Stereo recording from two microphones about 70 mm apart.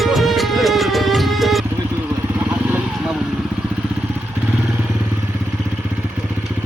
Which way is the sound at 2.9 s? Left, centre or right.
Centre.